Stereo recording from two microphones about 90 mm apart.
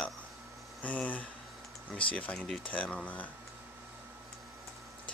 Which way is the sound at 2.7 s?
15° left (ahead or behind).